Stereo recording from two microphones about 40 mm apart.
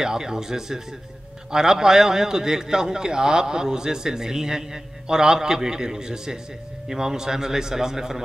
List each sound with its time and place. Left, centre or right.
0.0 s a man's voice: centre